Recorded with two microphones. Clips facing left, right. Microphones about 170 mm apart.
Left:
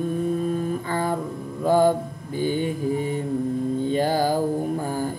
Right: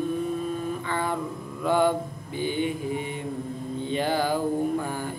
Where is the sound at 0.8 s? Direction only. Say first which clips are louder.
Left 3 dB; 40° left (ahead or behind).